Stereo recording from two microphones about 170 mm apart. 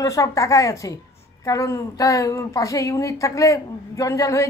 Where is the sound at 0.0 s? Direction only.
20° left (ahead or behind).